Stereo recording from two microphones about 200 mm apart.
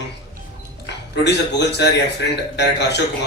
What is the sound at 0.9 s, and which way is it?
Speech, 60° left (ahead or behind).